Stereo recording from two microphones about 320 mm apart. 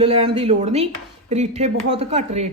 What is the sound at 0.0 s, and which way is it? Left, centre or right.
Speech, centre.